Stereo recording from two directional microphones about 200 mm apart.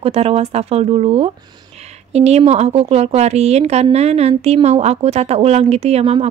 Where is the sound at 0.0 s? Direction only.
30° right (ahead or behind).